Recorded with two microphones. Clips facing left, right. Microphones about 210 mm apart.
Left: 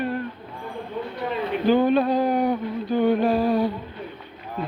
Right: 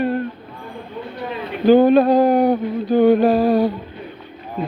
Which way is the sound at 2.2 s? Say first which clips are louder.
Right 7 dB; 70° right (ahead or behind).